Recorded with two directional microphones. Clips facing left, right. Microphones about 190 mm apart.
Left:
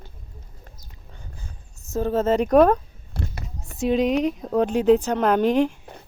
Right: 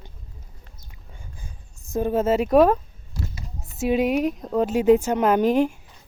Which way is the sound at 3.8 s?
5° right (ahead or behind).